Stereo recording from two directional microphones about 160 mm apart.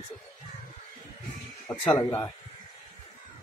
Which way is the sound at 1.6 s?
15° left (ahead or behind).